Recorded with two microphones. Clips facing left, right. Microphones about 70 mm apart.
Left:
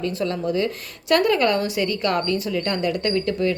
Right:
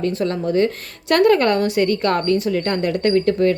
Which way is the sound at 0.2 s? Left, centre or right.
Right.